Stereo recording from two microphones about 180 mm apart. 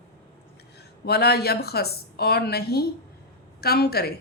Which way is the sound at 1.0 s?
65° left (ahead or behind).